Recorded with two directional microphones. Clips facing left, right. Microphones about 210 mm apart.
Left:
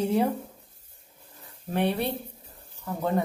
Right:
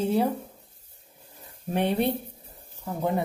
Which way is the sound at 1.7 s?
20° right (ahead or behind).